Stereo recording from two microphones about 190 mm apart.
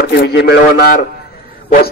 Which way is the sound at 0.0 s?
60° left (ahead or behind).